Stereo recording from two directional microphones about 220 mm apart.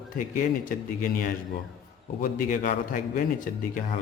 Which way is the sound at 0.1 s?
40° left (ahead or behind).